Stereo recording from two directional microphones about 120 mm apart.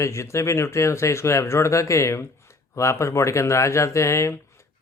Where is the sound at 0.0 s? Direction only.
25° left (ahead or behind).